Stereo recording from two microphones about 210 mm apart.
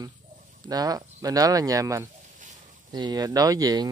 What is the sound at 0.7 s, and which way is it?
Speech, 15° right (ahead or behind).